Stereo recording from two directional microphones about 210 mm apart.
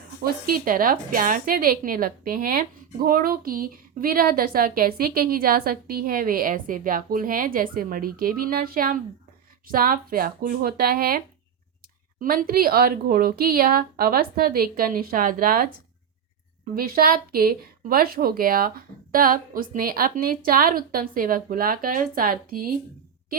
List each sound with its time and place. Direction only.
0.2 s a woman's voice: 45° right (ahead or behind)
12.2 s a woman's voice: 45° right (ahead or behind)
16.7 s a woman's voice: 45° right (ahead or behind)